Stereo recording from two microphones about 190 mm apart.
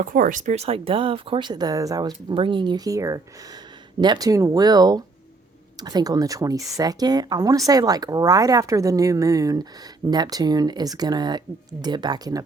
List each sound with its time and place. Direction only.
0.0 s speech: 45° right (ahead or behind); by 12.4 s 20° right (ahead or behind)